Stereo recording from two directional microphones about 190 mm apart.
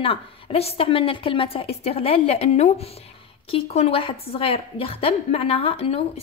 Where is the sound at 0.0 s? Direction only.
30° left (ahead or behind).